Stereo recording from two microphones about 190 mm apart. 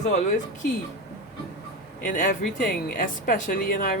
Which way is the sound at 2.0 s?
45° left (ahead or behind).